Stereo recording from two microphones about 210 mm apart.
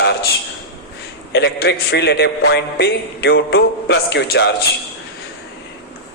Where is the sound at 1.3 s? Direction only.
55° left (ahead or behind).